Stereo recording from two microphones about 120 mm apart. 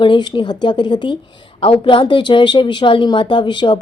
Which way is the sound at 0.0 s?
40° left (ahead or behind).